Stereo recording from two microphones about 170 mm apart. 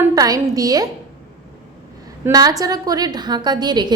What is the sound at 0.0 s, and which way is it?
Speech, 20° right (ahead or behind).